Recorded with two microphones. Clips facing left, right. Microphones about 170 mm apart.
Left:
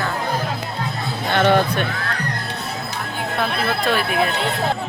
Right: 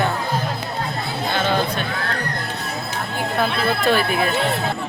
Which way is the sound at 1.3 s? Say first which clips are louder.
Left 6 dB; 65° left (ahead or behind).